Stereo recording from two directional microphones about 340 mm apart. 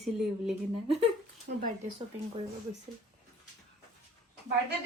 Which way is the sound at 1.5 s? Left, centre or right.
Right.